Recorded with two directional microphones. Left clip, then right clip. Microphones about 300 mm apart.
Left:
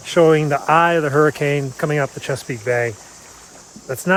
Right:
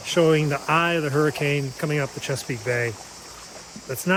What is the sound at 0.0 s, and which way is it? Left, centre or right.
Speech, centre.